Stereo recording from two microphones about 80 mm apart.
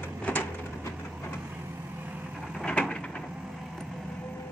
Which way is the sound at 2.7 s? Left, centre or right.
Centre.